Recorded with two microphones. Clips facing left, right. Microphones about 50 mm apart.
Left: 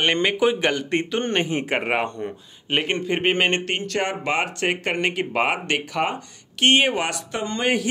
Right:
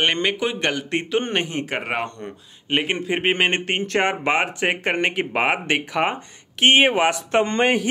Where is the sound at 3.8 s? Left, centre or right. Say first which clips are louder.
Right 4 dB; right.